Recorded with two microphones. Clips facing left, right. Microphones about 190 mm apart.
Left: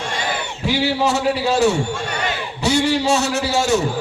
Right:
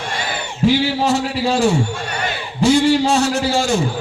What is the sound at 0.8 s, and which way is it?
Speech, 65° left (ahead or behind).